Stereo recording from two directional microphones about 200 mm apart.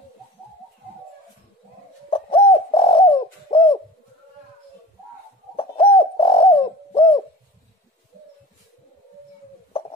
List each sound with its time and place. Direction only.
2.0 s bird: 25° left (ahead or behind)
5.6 s bird: 30° left (ahead or behind)